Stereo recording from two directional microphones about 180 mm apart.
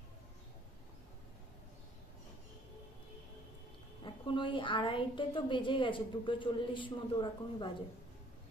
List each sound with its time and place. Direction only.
4.0 s a woman's voice: 25° left (ahead or behind)